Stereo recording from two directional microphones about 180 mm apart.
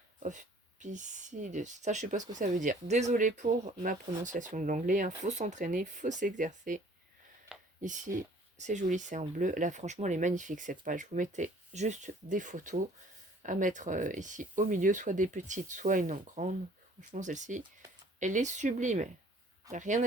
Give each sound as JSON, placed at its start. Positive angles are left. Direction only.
{"t": 0.2, "sound": "speech", "side_deg": -45}